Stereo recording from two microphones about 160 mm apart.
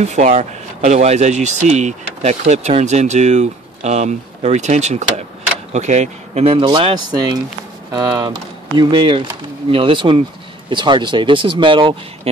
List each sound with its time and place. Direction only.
0.0 s speech: 45° right (ahead or behind); by 7.4 s 25° right (ahead or behind)
8.7 s speech: 30° right (ahead or behind)